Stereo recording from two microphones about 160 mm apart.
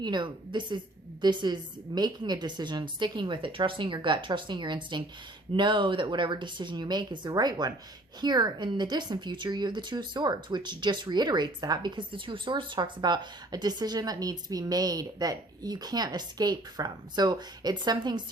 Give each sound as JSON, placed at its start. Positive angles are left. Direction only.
{"t": 0.0, "sound": "a woman's voice", "side_deg": -30}